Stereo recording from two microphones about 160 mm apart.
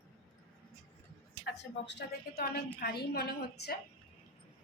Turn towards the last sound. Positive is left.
turn(degrees=80)